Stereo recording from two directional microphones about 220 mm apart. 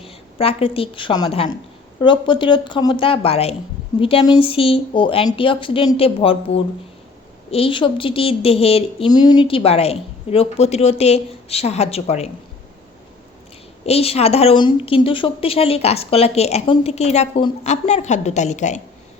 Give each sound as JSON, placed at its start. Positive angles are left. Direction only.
{"t": 0.0, "sound": "a woman's voice", "side_deg": 25}
{"t": 13.8, "sound": "a woman's voice", "side_deg": 25}